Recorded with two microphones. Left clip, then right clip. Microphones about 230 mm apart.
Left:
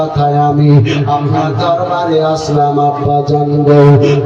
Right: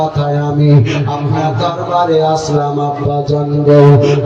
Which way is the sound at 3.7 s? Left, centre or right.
Left.